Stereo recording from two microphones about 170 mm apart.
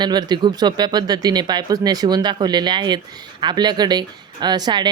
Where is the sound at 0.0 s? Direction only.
25° right (ahead or behind).